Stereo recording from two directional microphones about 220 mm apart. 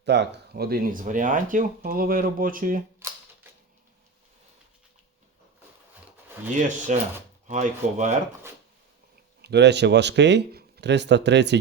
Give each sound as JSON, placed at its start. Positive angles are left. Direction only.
{"t": 0.0, "sound": "speech", "side_deg": -50}
{"t": 6.6, "sound": "speech", "side_deg": -35}
{"t": 9.4, "sound": "speech", "side_deg": -50}